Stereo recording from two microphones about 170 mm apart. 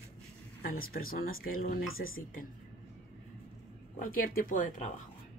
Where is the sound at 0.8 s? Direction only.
60° left (ahead or behind).